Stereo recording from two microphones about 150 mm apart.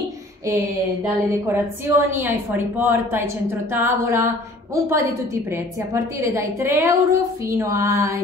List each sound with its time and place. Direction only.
1.0 s a woman's voice: 15° right (ahead or behind)